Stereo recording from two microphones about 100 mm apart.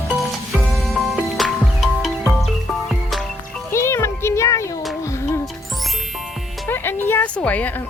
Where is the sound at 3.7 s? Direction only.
30° left (ahead or behind).